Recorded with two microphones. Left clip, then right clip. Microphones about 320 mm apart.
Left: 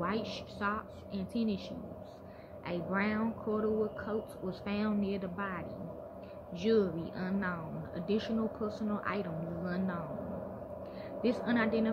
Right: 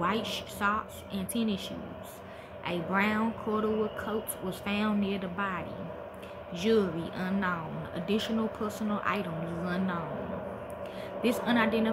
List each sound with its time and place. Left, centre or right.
0.0 s speech: centre
2.6 s speech: centre
11.2 s speech: centre